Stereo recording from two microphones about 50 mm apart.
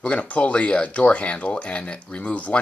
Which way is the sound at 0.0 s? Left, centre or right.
Left.